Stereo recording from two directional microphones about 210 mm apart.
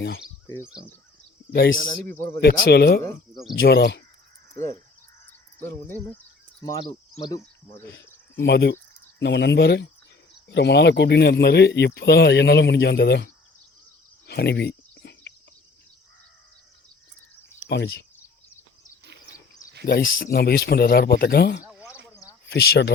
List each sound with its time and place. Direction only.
2.4 s speech: 50° left (ahead or behind)
5.5 s speech: 10° left (ahead or behind)
7.9 s speech: 55° left (ahead or behind)
14.3 s a sound: 50° left (ahead or behind)
17.7 s speech: 55° left (ahead or behind)
19.8 s speech: 50° left (ahead or behind)
21.6 s a sound: 5° right (ahead or behind)
22.4 s speech: 50° left (ahead or behind)